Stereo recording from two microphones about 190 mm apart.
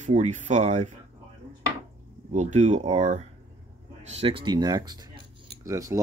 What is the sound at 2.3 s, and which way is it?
Speech, 40° right (ahead or behind).